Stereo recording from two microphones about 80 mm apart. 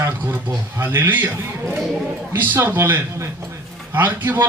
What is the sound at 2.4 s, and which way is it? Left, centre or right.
A man's voice, right.